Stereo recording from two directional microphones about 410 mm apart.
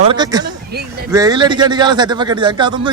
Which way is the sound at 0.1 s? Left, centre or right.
Centre.